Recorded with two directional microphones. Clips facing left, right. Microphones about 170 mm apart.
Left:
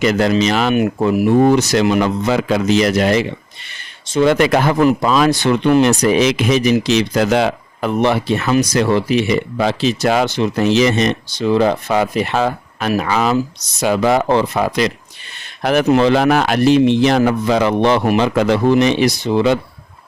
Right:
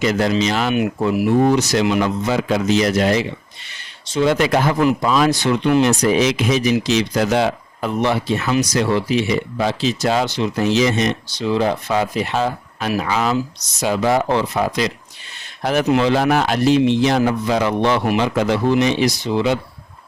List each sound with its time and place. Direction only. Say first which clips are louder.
0.0 s speech: left 3 dB; 65° left (ahead or behind)
0.7 s speech: left 3 dB; 50° left (ahead or behind)
5.0 s speech: left 2 dB; 85° left
11.3 s speech: left 5 dB; 55° left (ahead or behind); by 15.9 s 70° left (ahead or behind)
15.9 s speech: left 3 dB; 60° left (ahead or behind)